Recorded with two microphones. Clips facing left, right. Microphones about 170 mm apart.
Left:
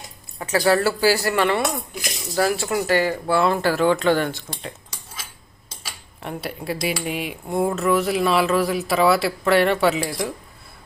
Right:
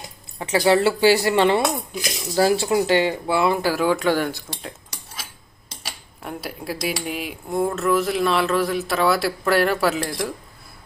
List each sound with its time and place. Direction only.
0.3 s speech: 25° right (ahead or behind); by 4.7 s 5° right (ahead or behind)
6.2 s speech: centre (ahead or behind)